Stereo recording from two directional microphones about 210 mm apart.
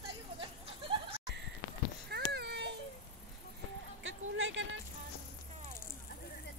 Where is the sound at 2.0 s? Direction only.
50° right (ahead or behind).